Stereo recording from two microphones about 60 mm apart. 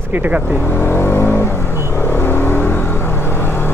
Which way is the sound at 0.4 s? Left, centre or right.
Left.